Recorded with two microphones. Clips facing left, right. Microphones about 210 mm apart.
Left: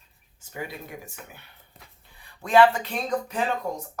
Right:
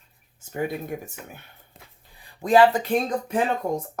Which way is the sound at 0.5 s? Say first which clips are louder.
Right 8 dB; 50° right (ahead or behind).